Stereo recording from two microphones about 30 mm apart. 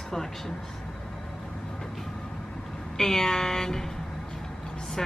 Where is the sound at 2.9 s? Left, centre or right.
Centre.